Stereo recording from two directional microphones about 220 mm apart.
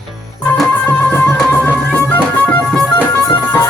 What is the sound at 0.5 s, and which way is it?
Music, centre (ahead or behind).